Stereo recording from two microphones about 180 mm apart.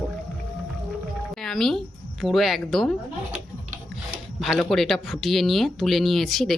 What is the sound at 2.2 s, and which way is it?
Speech, centre (ahead or behind).